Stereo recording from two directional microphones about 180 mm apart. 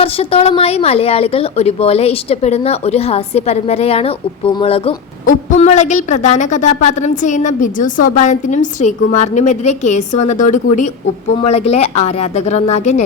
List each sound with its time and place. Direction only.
0.0 s a woman's voice: 30° left (ahead or behind)
5.2 s a woman's voice: 45° left (ahead or behind)